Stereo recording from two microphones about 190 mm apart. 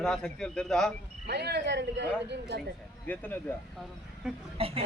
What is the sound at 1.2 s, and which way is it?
Speech, 60° right (ahead or behind).